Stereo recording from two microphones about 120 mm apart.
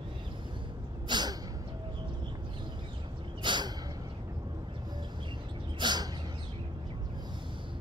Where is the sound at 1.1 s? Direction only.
35° right (ahead or behind).